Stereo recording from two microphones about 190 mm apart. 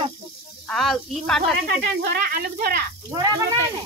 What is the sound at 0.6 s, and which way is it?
Speech, centre (ahead or behind).